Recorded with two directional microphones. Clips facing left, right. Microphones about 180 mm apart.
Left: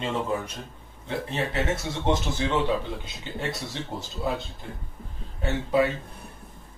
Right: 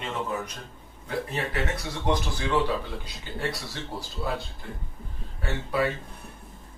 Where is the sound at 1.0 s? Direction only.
25° left (ahead or behind).